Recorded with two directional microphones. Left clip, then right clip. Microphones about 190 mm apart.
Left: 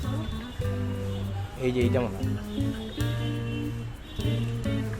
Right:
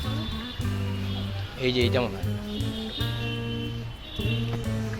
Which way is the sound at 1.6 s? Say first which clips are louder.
Right 2 dB; 5° left (ahead or behind).